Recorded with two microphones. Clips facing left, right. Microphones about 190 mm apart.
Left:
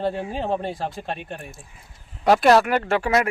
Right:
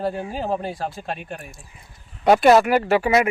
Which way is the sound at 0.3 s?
Centre (ahead or behind).